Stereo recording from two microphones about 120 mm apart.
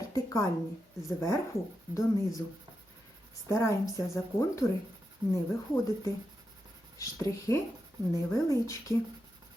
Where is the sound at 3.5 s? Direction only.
25° left (ahead or behind).